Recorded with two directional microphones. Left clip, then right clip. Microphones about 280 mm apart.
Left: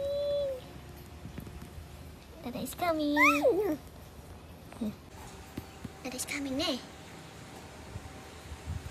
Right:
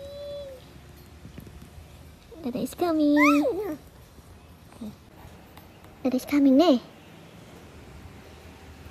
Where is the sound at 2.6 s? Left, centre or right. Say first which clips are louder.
Right 6 dB; centre.